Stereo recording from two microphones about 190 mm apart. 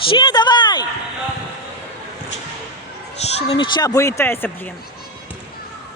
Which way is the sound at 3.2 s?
30° left (ahead or behind).